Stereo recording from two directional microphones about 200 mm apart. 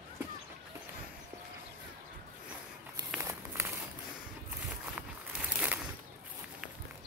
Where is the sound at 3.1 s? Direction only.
15° right (ahead or behind).